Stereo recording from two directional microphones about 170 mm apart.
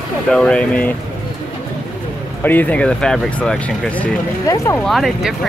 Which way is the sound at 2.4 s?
10° left (ahead or behind).